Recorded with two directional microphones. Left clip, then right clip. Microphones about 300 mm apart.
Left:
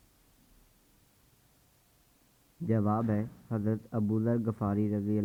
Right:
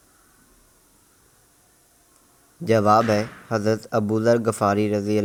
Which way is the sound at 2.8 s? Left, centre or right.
Right.